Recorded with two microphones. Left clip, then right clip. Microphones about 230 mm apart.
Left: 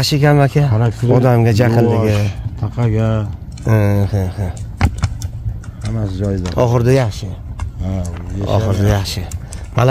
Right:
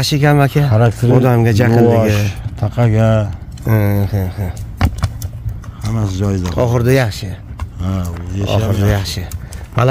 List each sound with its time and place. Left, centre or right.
0.0 s speech: centre
0.7 s speech: right
1.1 s speech: centre
1.9 s speech: right
3.6 s speech: centre
5.9 s speech: right
6.4 s speech: centre
7.8 s speech: right
8.5 s speech: centre